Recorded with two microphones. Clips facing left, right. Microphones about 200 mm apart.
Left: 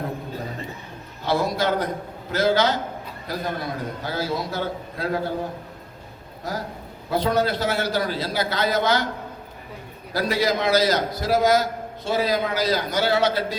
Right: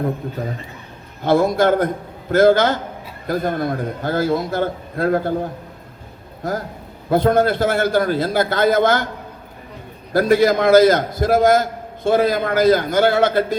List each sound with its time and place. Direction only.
1.2 s a man's voice: 50° right (ahead or behind)
6.4 s a man's voice: 50° right (ahead or behind)
10.1 s a man's voice: 50° right (ahead or behind)